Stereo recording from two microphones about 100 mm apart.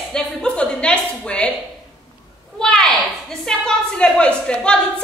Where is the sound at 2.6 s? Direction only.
5° left (ahead or behind).